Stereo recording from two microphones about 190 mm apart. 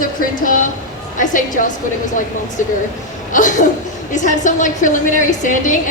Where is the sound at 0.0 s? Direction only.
45° left (ahead or behind).